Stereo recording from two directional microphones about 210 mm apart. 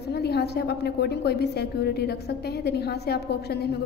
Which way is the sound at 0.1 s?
50° left (ahead or behind).